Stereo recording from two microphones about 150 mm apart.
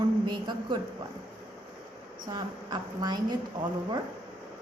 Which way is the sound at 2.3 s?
30° right (ahead or behind).